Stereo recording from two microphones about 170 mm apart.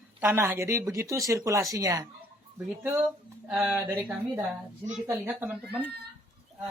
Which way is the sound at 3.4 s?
5° right (ahead or behind).